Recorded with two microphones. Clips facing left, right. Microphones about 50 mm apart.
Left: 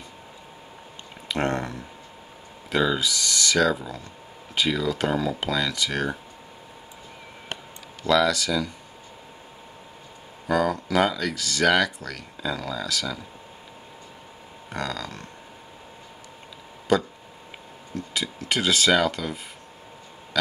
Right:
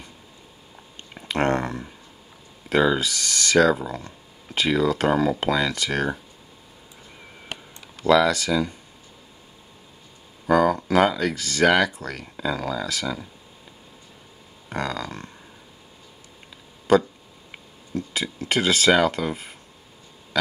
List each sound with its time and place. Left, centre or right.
1.3 s speech: right
2.7 s speech: centre
3.0 s speech: right
8.1 s speech: right
10.4 s speech: right
14.7 s speech: right
17.9 s speech: right